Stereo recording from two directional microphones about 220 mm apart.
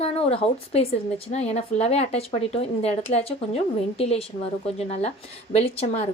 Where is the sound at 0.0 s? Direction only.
25° left (ahead or behind).